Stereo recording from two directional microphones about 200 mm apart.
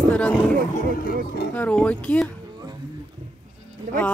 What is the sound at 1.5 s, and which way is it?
Speech, 5° left (ahead or behind).